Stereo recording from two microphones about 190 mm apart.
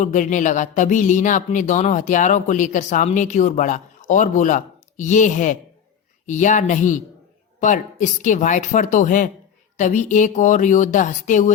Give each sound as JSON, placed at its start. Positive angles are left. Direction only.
{"t": 0.0, "sound": "speech", "side_deg": 40}